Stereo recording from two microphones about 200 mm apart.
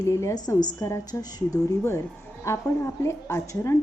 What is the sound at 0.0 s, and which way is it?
A woman's voice, 15° left (ahead or behind).